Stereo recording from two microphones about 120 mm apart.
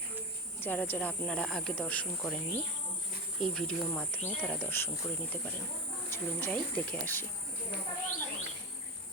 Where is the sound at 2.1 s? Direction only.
Centre (ahead or behind).